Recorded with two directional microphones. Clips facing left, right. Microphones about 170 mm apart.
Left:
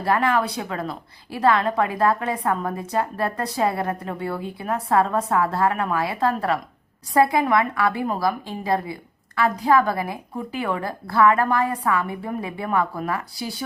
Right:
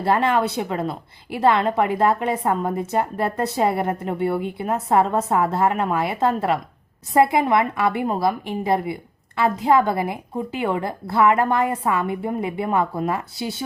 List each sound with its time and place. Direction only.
0.0 s a woman's voice: 25° right (ahead or behind)